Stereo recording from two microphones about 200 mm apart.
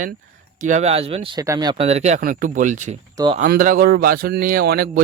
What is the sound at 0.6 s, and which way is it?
Speech, 35° right (ahead or behind).